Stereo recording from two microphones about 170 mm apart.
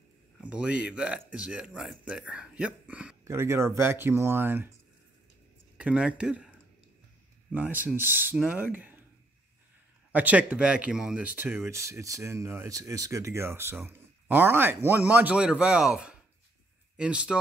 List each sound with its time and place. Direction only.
0.4 s speech: 5° right (ahead or behind)
5.8 s speech: 5° right (ahead or behind)
10.1 s speech: 10° right (ahead or behind)